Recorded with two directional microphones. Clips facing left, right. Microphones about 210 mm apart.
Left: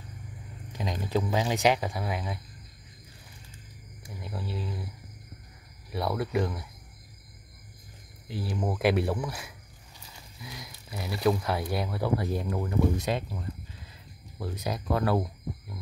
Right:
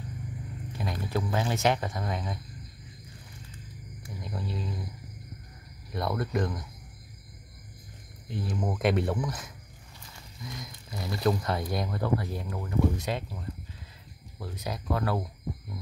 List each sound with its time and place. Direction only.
0.7 s speech: 15° left (ahead or behind)
4.2 s speech: 5° left (ahead or behind)
5.9 s speech: 5° left (ahead or behind)
8.3 s speech: 5° left (ahead or behind)
12.4 s speech: 20° left (ahead or behind)
14.6 s speech: 15° left (ahead or behind)